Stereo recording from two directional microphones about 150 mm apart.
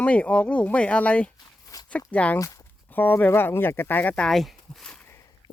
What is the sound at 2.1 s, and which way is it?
Speech, 10° left (ahead or behind).